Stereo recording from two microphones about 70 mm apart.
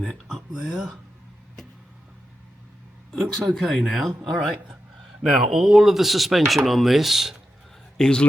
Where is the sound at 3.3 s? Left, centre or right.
Centre.